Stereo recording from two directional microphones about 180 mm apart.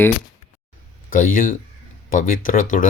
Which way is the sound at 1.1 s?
50° left (ahead or behind).